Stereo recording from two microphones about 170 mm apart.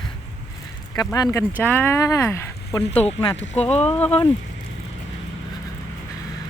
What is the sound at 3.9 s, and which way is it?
Speech, 10° left (ahead or behind).